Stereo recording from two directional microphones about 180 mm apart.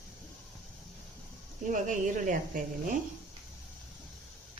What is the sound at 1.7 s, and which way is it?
Speech, 45° right (ahead or behind).